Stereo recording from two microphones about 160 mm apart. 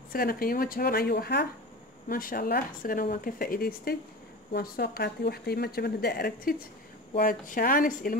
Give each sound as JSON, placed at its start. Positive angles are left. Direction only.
{"t": 0.1, "sound": "a woman's voice", "side_deg": 65}
{"t": 2.0, "sound": "a woman's voice", "side_deg": 65}